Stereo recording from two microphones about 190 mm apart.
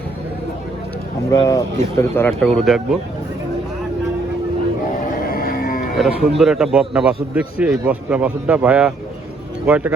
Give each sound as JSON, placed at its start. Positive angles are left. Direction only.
{"t": 1.3, "sound": "speech", "side_deg": 20}
{"t": 2.4, "sound": "a man's voice", "side_deg": 0}
{"t": 5.2, "sound": "cattle", "side_deg": 50}
{"t": 6.0, "sound": "a man's voice", "side_deg": 0}